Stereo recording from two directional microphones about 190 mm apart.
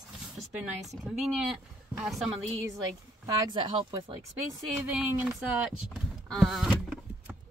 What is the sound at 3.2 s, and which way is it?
Speech, 20° right (ahead or behind).